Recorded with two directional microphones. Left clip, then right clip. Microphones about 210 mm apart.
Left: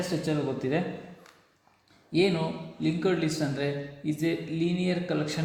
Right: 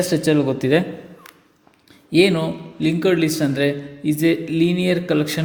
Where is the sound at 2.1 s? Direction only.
50° right (ahead or behind).